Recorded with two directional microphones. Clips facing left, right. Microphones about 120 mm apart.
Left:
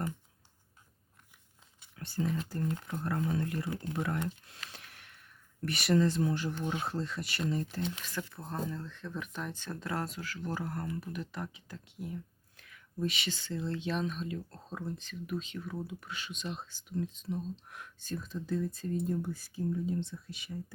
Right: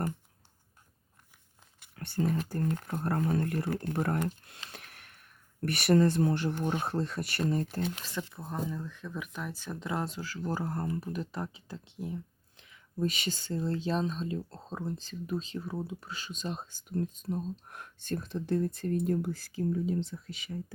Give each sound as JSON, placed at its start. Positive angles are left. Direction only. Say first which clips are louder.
{"t": 2.0, "sound": "speech", "louder": "right 3 dB", "side_deg": -60}
{"t": 4.7, "sound": "a sound", "louder": "right 3 dB", "side_deg": -50}
{"t": 5.6, "sound": "speech", "louder": "right 3 dB", "side_deg": -55}
{"t": 7.9, "sound": "speech", "louder": "right 2 dB", "side_deg": -35}
{"t": 8.1, "sound": "speech", "louder": "right 2 dB", "side_deg": -25}
{"t": 8.4, "sound": "speech", "louder": "right 2 dB", "side_deg": -5}
{"t": 11.5, "sound": "a sound", "louder": "right 3 dB", "side_deg": -30}
{"t": 13.0, "sound": "speech", "louder": "right 3 dB", "side_deg": -40}